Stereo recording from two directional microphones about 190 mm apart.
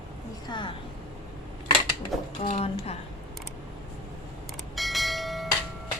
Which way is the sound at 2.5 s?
35° left (ahead or behind).